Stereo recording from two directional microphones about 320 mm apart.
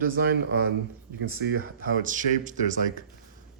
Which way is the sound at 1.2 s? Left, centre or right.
Right.